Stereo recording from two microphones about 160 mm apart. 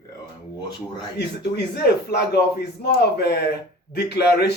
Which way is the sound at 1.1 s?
90° left.